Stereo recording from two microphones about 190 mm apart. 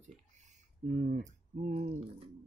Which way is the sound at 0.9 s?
40° right (ahead or behind).